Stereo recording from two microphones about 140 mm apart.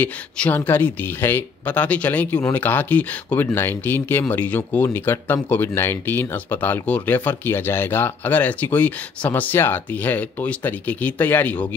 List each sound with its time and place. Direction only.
0.0 s speech: 10° left (ahead or behind)